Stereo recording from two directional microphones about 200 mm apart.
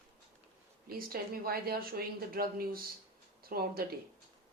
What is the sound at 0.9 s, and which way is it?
A woman's voice, 50° right (ahead or behind).